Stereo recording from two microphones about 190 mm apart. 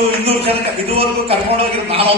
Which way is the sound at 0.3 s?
30° right (ahead or behind).